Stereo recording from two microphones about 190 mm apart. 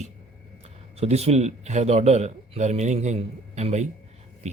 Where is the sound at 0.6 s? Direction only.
35° right (ahead or behind).